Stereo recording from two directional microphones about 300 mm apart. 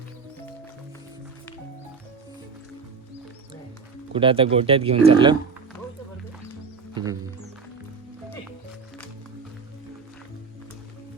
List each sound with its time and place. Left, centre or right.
4.1 s speech: centre
6.9 s music: centre